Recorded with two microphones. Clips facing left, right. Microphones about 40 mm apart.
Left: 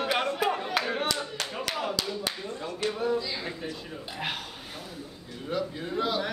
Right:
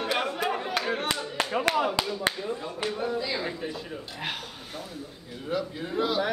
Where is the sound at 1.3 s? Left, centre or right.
Right.